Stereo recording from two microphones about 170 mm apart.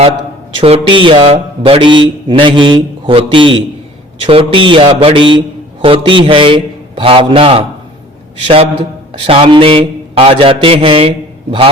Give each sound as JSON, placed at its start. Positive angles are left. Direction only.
{"t": 0.5, "sound": "speech", "side_deg": -35}